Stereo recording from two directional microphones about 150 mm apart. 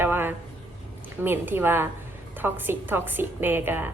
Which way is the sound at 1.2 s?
15° right (ahead or behind).